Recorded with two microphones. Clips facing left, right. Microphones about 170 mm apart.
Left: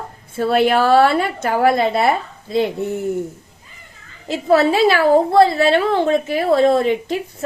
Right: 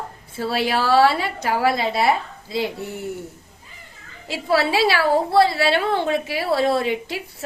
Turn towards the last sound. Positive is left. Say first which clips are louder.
# left 6 dB
turn(degrees=40)  # may be behind; listen again after turning